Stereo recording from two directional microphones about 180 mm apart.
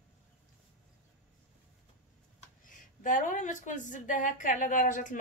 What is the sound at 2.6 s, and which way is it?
Speech, 45° left (ahead or behind).